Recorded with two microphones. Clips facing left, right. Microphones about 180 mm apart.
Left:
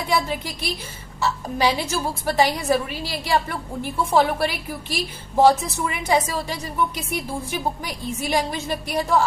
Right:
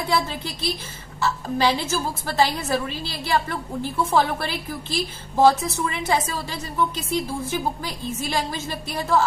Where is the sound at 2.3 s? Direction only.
15° left (ahead or behind).